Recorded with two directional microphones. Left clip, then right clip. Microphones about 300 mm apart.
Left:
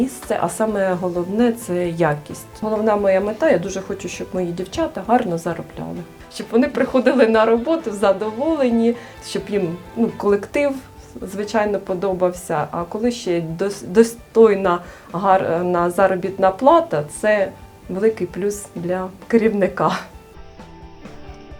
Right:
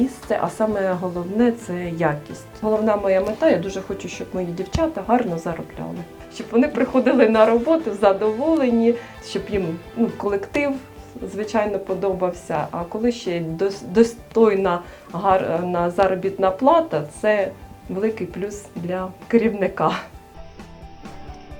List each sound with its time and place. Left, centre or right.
0.0 s a woman's voice: left